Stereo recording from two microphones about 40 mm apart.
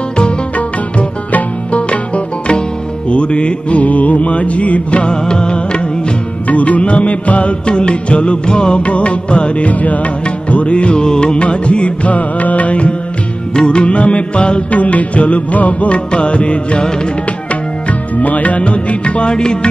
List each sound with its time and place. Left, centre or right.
0.6 s music: left
6.4 s music: left
13.6 s music: left
17.8 s music: left